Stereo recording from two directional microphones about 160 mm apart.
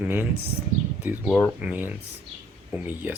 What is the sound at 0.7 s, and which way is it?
Speech, 55° right (ahead or behind).